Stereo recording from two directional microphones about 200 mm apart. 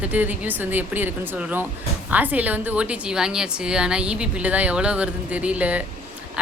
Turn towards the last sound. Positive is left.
turn(degrees=-5)  # may be behind; listen again after turning